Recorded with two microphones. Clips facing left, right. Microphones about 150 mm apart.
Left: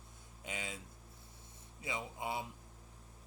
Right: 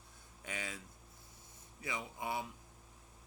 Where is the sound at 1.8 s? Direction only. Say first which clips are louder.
Left 1 dB; 25° left (ahead or behind).